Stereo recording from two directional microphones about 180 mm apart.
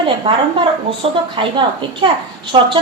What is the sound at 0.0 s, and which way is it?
A woman's voice, 30° right (ahead or behind).